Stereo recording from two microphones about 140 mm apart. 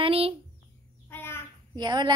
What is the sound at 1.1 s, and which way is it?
Bird, 15° left (ahead or behind).